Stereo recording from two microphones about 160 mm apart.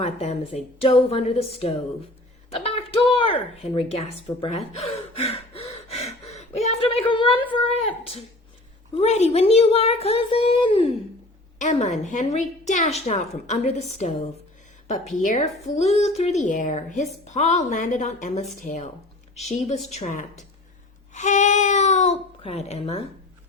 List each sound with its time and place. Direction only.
0.0 s speech: 45° left (ahead or behind)
2.5 s a sound: 35° left (ahead or behind)
9.0 s speech: 45° left (ahead or behind)
11.6 s a woman's voice: 50° left (ahead or behind)